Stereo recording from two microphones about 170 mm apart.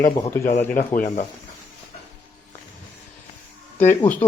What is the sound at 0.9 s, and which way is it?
Speech, 50° left (ahead or behind).